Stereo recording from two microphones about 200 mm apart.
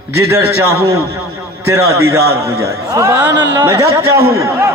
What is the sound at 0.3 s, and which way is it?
A man's voice, 15° right (ahead or behind).